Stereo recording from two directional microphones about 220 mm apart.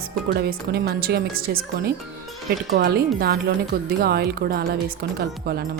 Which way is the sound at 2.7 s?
45° right (ahead or behind).